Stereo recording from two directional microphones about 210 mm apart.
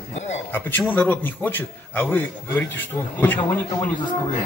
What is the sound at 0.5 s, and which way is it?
A man's voice, 10° left (ahead or behind).